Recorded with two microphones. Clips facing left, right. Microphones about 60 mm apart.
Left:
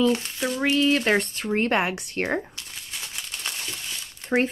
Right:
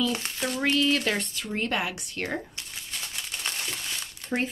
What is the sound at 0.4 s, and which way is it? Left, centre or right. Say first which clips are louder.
Speech: even; centre.